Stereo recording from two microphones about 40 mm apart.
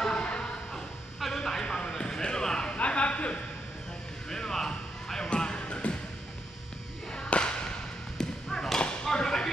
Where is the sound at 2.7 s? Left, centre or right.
Left.